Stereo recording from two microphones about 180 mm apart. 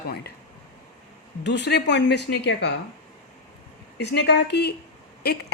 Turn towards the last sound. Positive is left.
turn(degrees=60)  # may be behind; listen again after turning